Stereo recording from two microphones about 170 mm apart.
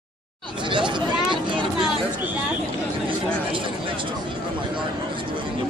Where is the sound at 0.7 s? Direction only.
30° right (ahead or behind).